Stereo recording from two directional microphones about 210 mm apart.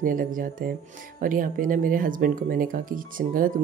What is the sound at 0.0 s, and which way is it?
Speech, 40° right (ahead or behind).